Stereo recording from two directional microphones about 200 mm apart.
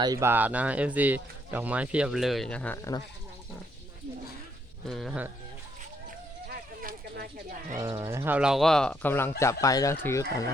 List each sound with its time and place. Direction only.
0.0 s speech: 15° right (ahead or behind); by 3.0 s 15° left (ahead or behind)
4.9 s speech: centre (ahead or behind)
6.5 s a sound: 50° right (ahead or behind)
7.8 s speech: 20° right (ahead or behind); by 10.2 s 15° left (ahead or behind)